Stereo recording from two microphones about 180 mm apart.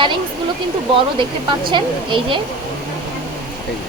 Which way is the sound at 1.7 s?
25° right (ahead or behind).